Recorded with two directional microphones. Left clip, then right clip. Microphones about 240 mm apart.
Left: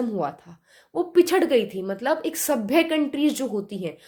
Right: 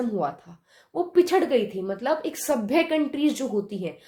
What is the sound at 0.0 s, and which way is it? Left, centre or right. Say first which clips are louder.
A woman's voice: even; left.